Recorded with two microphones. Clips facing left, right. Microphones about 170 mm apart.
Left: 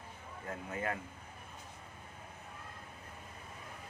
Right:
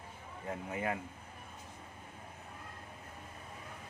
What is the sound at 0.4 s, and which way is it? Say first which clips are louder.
Speech: right 2 dB; 15° right (ahead or behind).